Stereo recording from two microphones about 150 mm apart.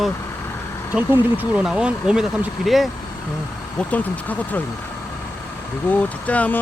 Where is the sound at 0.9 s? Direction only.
10° right (ahead or behind).